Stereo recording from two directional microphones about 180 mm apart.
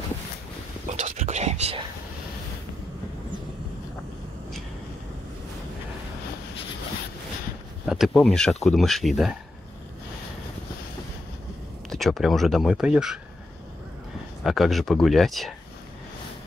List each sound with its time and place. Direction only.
0.9 s whispering: 40° right (ahead or behind)
7.8 s speech: centre (ahead or behind)
11.9 s speech: centre (ahead or behind)
14.4 s speech: centre (ahead or behind)